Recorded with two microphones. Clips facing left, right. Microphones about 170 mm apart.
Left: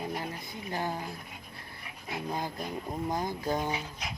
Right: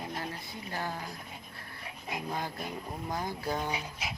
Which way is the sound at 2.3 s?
15° left (ahead or behind).